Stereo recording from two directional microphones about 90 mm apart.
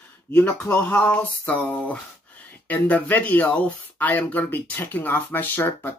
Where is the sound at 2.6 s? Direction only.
20° left (ahead or behind).